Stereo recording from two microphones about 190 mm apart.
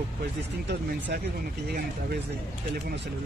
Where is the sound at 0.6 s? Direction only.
65° right (ahead or behind).